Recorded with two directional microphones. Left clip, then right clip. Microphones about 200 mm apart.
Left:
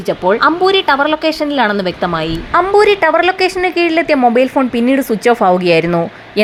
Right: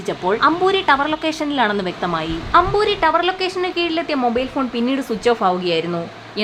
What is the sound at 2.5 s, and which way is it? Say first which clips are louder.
A woman's voice: left 5 dB; 30° left (ahead or behind).